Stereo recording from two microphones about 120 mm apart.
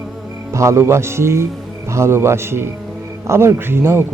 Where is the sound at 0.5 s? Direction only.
25° right (ahead or behind).